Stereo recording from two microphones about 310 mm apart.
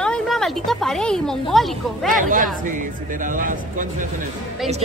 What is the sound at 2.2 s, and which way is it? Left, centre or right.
Speech, right.